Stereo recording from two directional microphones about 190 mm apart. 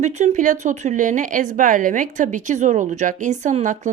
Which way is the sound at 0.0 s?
35° right (ahead or behind).